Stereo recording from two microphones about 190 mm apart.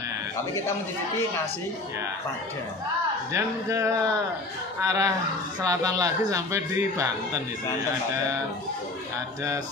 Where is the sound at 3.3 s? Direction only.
15° right (ahead or behind).